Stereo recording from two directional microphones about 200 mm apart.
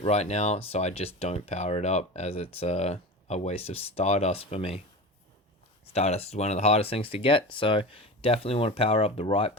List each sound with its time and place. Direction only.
0.0 s speech: 30° left (ahead or behind)
5.9 s speech: 30° left (ahead or behind)